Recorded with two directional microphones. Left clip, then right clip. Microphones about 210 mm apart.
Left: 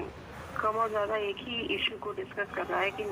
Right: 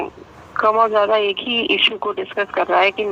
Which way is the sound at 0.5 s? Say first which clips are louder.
Right 14 dB; 45° right (ahead or behind).